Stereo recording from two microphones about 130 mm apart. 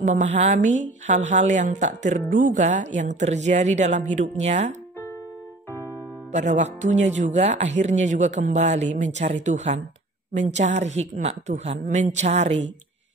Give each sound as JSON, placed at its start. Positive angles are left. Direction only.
{"t": 0.0, "sound": "a woman's voice", "side_deg": -75}
{"t": 5.7, "sound": "music", "side_deg": 20}
{"t": 6.3, "sound": "speech", "side_deg": -65}